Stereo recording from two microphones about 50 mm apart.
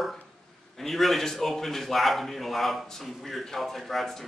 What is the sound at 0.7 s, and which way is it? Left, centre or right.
A man's voice, centre.